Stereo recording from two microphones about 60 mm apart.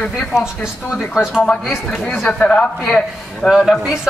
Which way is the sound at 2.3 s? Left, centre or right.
Centre.